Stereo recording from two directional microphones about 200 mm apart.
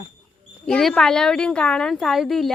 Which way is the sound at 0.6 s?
5° left (ahead or behind).